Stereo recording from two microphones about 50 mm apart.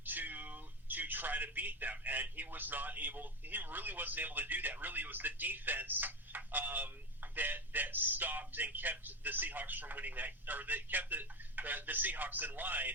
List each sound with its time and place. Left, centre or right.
0.0 s speech: right